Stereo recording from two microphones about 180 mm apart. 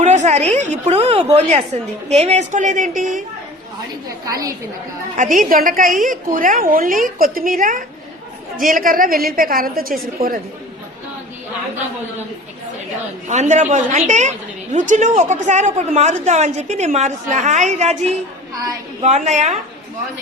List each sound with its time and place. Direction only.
0.0 s a woman's voice: 40° right (ahead or behind)
4.3 s a woman's voice: 20° right (ahead or behind)
5.4 s a woman's voice: 50° right (ahead or behind)
13.2 s a woman's voice: 40° right (ahead or behind)
18.5 s a woman's voice: 20° right (ahead or behind)
19.0 s a woman's voice: 40° right (ahead or behind)